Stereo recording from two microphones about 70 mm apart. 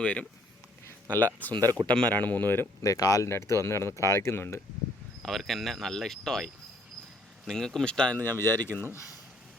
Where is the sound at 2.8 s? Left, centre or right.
Left.